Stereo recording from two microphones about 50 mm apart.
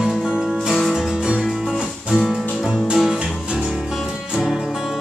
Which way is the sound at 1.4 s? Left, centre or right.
Centre.